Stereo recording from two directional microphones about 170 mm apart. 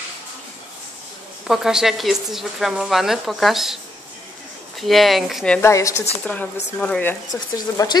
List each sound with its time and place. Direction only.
1.5 s a woman's voice: 5° right (ahead or behind)
5.6 s speech: 15° left (ahead or behind)
7.3 s speech: 20° left (ahead or behind)